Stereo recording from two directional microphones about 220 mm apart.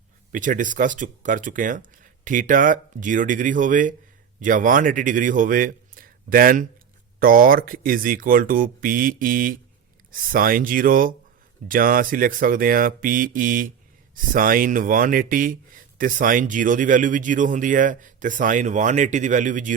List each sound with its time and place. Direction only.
0.3 s a man's voice: 35° right (ahead or behind)